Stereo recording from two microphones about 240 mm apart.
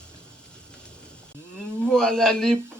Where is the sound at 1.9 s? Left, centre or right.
Centre.